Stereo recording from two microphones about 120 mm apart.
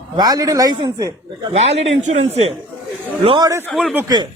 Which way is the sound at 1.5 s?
65° right (ahead or behind).